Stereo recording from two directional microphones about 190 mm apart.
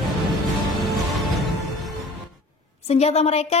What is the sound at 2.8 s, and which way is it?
Speech, 35° left (ahead or behind).